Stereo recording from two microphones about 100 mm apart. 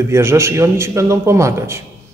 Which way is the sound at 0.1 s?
25° right (ahead or behind).